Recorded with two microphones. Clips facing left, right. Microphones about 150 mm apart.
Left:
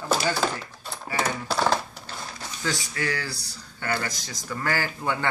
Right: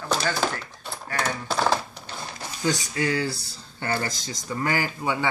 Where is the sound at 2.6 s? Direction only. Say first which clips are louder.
Right 4 dB; 20° right (ahead or behind).